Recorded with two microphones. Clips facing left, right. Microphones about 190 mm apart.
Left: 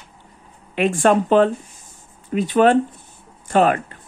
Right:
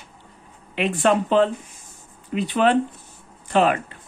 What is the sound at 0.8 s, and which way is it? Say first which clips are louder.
Speech: left 3 dB; 45° left (ahead or behind).